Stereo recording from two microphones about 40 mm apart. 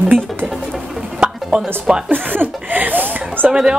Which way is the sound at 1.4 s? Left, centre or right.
Centre.